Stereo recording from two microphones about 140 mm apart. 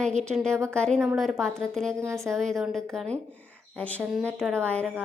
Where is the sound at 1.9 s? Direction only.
20° right (ahead or behind).